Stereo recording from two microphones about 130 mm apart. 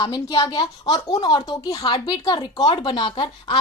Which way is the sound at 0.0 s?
35° left (ahead or behind).